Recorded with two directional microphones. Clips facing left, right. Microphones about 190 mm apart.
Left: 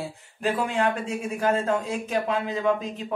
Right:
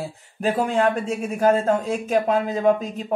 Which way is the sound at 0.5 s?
45° right (ahead or behind).